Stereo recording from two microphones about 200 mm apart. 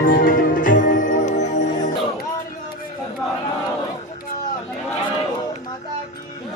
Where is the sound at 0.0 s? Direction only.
45° left (ahead or behind).